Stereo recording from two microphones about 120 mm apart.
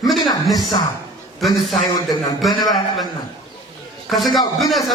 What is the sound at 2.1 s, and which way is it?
Speech, 35° left (ahead or behind).